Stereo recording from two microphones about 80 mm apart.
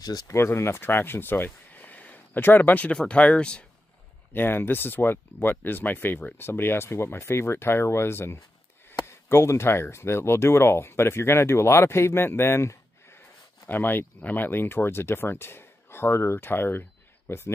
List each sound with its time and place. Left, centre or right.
0.3 s speech: left; by 3.6 s centre
4.3 s speech: left